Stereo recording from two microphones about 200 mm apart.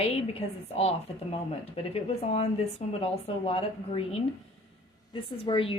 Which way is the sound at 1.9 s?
30° left (ahead or behind).